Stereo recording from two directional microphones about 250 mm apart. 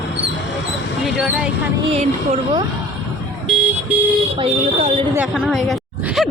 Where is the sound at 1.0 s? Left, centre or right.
Centre.